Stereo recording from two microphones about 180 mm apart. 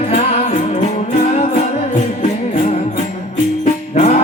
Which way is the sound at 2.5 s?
35° left (ahead or behind).